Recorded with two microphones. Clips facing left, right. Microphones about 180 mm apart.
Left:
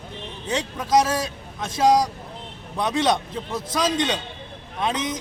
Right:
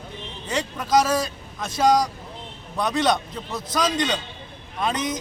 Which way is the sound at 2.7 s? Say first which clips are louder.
Even; centre (ahead or behind).